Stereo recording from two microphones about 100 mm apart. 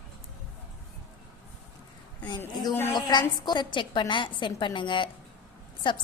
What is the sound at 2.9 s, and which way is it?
A woman's voice, 45° left (ahead or behind).